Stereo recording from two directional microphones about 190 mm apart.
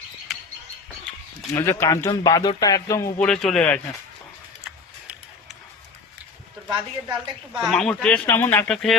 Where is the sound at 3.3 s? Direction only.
5° left (ahead or behind).